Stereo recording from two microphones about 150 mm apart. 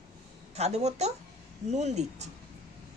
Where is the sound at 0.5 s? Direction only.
45° right (ahead or behind).